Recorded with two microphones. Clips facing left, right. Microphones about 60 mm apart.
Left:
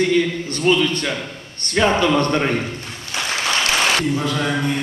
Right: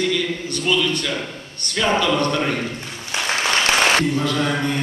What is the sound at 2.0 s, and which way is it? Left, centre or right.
Speech, left.